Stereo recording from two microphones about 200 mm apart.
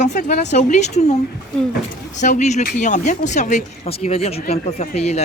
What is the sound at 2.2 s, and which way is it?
Speech, 35° left (ahead or behind).